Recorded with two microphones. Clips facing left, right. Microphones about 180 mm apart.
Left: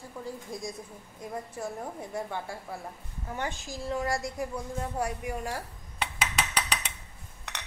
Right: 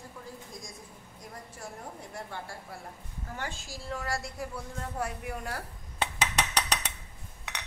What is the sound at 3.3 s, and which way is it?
A woman's voice, 20° left (ahead or behind).